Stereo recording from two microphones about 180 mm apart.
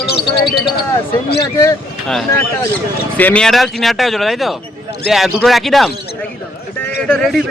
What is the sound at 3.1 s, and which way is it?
Speech, 10° left (ahead or behind).